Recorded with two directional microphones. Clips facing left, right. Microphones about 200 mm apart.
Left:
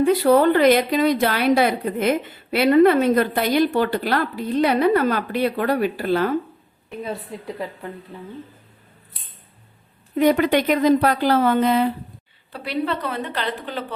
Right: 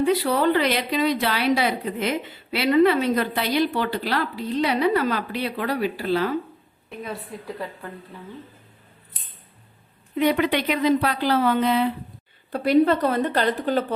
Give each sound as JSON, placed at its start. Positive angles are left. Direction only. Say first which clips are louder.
{"t": 0.0, "sound": "a woman's voice", "louder": "left 5 dB", "side_deg": 50}
{"t": 7.0, "sound": "a woman's voice", "louder": "left 3 dB", "side_deg": 25}
{"t": 10.2, "sound": "a woman's voice", "louder": "left 4 dB", "side_deg": 45}
{"t": 12.5, "sound": "a woman's voice", "louder": "right 7 dB", "side_deg": -45}